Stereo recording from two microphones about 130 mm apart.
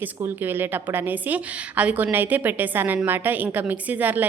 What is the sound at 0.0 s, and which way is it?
A woman's voice, 15° right (ahead or behind).